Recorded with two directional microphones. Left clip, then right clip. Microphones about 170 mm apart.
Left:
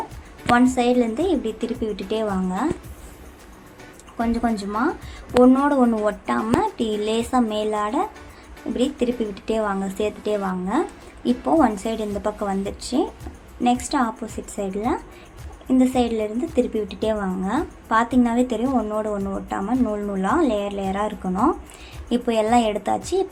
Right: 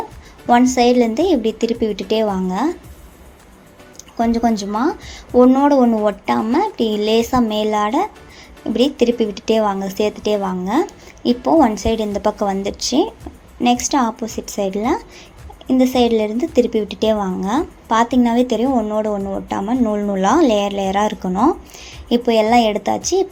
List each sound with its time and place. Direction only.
0.5 s a woman's voice: 30° right (ahead or behind)
4.2 s a woman's voice: 25° right (ahead or behind)